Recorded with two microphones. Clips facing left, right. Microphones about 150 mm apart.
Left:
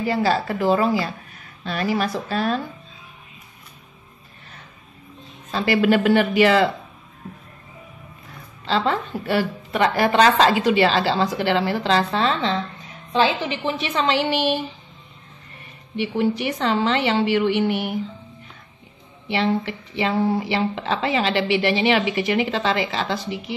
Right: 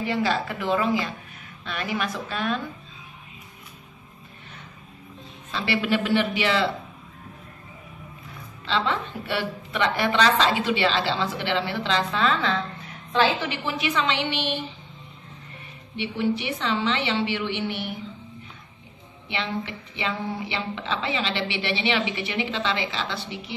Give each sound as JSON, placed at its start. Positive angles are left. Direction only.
{"t": 0.0, "sound": "a woman's voice", "side_deg": 40}
{"t": 5.5, "sound": "a woman's voice", "side_deg": 45}
{"t": 8.6, "sound": "a woman's voice", "side_deg": 40}
{"t": 13.1, "sound": "a woman's voice", "side_deg": 15}
{"t": 13.9, "sound": "a woman's voice", "side_deg": 40}
{"t": 16.0, "sound": "a woman's voice", "side_deg": 45}
{"t": 19.2, "sound": "a woman's voice", "side_deg": 40}